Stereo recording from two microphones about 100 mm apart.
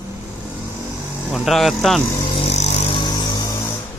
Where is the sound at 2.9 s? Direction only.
50° left (ahead or behind).